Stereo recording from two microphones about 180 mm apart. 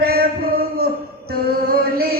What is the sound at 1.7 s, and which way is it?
Chant, 60° right (ahead or behind).